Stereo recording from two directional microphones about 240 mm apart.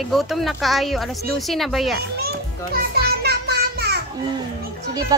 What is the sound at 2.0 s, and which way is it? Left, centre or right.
Children playing, right.